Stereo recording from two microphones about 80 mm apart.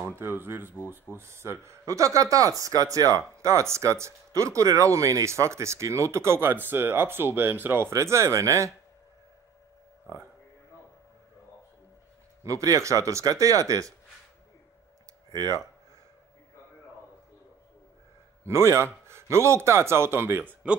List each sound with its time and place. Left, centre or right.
0.0 s speech: right
7.9 s speech: right
12.4 s speech: right
15.3 s speech: right
18.4 s speech: right